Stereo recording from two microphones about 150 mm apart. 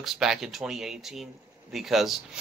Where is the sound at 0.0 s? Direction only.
Centre (ahead or behind).